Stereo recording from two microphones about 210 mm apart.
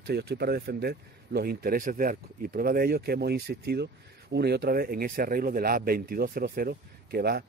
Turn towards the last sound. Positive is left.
turn(degrees=-45)  # may be behind; listen again after turning